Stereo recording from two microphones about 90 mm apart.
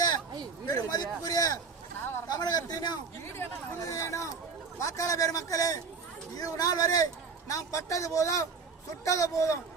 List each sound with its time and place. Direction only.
0.7 s a man's voice: 45° left (ahead or behind)
3.2 s a man's voice: 30° left (ahead or behind)